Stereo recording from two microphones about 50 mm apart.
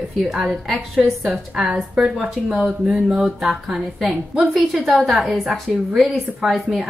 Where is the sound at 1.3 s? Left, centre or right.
Centre.